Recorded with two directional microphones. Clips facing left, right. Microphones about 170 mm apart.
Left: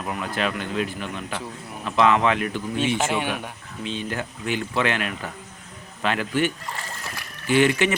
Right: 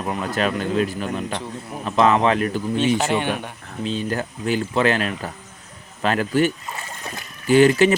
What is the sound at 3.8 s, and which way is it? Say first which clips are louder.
Speech: right 5 dB; 40° right (ahead or behind).